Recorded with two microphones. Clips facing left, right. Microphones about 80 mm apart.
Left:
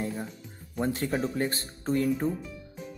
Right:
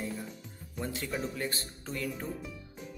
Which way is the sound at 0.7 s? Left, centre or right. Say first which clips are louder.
Left 7 dB; left.